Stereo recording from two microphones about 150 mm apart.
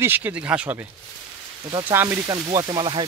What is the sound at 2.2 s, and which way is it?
Speech, 30° right (ahead or behind).